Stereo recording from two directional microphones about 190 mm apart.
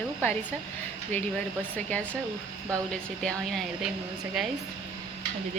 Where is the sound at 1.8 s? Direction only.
10° left (ahead or behind).